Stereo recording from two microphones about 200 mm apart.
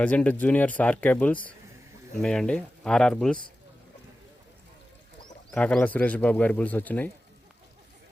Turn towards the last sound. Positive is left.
turn(degrees=10)  # may be behind; listen again after turning